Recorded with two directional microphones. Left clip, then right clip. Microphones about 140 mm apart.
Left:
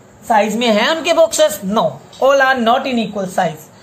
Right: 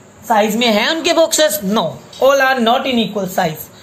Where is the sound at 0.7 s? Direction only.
20° right (ahead or behind).